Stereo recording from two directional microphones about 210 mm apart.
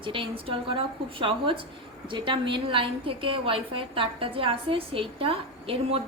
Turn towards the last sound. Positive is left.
turn(degrees=-30)  # may be behind; listen again after turning